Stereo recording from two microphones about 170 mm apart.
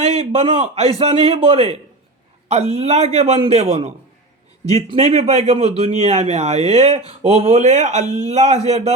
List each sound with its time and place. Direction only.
0.0 s speech: 40° right (ahead or behind)